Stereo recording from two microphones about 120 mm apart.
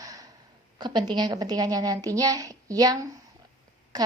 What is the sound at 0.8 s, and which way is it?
A woman's voice, 35° right (ahead or behind).